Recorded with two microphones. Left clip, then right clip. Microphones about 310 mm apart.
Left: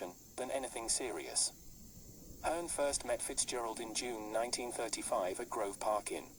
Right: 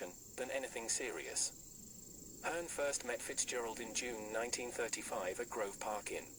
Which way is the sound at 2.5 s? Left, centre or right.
Right.